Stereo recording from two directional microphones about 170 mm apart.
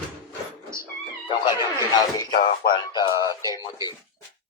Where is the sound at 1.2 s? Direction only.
25° left (ahead or behind).